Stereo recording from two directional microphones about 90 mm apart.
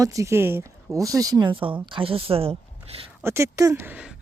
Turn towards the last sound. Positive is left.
turn(degrees=-25)  # may be behind; listen again after turning